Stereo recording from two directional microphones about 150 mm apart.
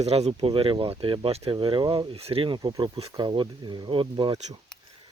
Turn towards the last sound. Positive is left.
turn(degrees=-30)  # may be behind; listen again after turning